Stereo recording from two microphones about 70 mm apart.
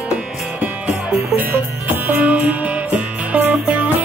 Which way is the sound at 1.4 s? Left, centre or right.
Right.